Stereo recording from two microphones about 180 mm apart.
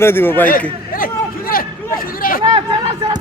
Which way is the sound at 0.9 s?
50° left (ahead or behind).